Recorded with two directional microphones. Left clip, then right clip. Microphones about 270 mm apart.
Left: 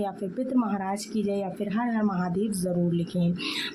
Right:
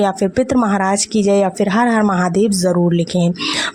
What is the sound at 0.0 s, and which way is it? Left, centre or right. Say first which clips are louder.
Speech: right 15 dB; right.